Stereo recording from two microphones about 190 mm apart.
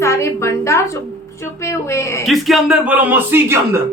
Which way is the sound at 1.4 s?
15° left (ahead or behind).